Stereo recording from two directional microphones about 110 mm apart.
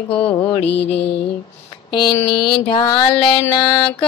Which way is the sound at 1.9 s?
45° left (ahead or behind).